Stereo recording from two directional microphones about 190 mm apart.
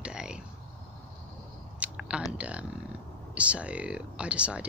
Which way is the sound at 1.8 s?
5° right (ahead or behind).